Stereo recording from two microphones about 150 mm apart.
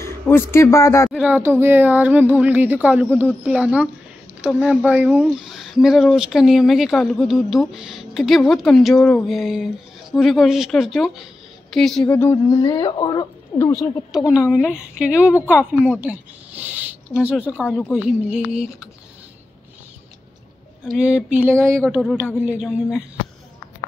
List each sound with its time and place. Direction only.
0.0 s a man's voice: 15° left (ahead or behind)
1.1 s speech: 10° right (ahead or behind); by 13.7 s 25° left (ahead or behind)
14.1 s speech: 5° right (ahead or behind)
20.9 s speech: 10° right (ahead or behind)